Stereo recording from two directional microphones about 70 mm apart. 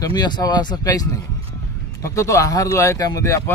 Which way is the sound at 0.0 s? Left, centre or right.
Left.